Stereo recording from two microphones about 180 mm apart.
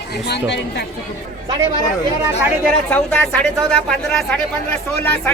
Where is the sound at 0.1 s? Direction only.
70° left (ahead or behind).